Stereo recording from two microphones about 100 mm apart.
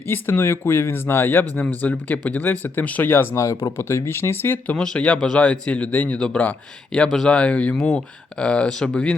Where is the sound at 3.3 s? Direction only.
30° left (ahead or behind).